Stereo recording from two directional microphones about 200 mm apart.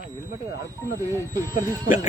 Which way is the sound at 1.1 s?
15° left (ahead or behind).